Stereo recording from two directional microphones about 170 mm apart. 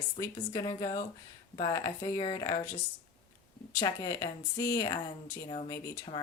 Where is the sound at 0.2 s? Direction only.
25° left (ahead or behind).